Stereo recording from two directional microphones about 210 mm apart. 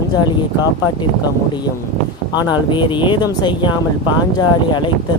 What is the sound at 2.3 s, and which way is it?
Speech, 20° left (ahead or behind).